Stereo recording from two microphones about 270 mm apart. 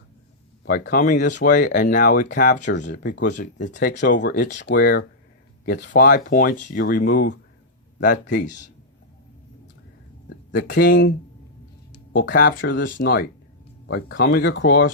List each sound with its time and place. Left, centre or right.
0.7 s speech: left
10.2 s speech: left
12.1 s speech: left